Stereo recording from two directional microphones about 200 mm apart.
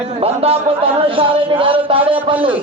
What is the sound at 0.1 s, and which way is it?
A man's voice, 30° right (ahead or behind).